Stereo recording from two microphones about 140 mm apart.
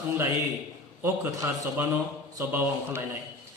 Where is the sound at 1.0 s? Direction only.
15° right (ahead or behind).